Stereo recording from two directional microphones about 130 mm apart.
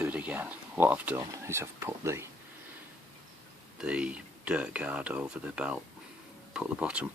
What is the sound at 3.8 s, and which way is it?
Speech, 10° right (ahead or behind).